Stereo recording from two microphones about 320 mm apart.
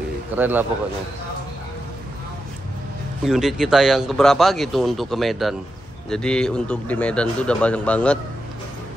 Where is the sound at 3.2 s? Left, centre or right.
Centre.